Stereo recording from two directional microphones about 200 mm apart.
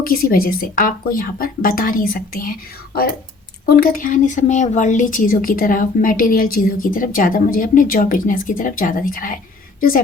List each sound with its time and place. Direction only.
0.0 s speech: 45° left (ahead or behind)